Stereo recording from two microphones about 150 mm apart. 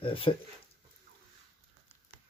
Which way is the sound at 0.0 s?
35° left (ahead or behind).